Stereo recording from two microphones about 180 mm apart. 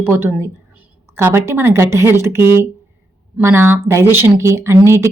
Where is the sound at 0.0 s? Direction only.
15° right (ahead or behind).